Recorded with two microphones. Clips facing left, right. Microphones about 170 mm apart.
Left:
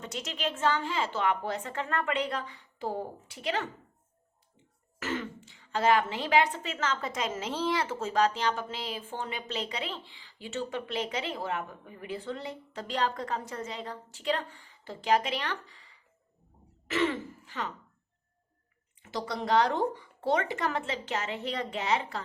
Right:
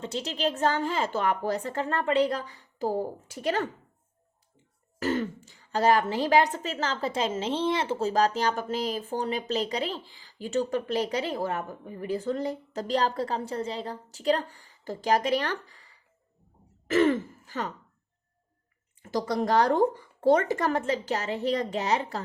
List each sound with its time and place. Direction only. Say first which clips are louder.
0.0 s speech: right 5 dB; 30° right (ahead or behind)
4.9 s speech: right 7 dB; 40° right (ahead or behind)
16.9 s throat clearing: right 7 dB; 45° right (ahead or behind)
19.0 s speech: right 6 dB; 45° right (ahead or behind)